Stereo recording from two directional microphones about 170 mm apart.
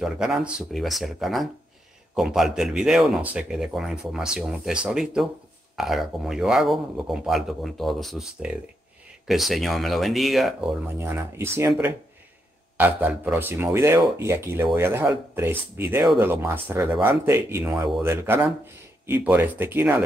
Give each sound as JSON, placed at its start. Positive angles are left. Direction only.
{"t": 0.0, "sound": "speech", "side_deg": -5}
{"t": 11.0, "sound": "speech", "side_deg": -15}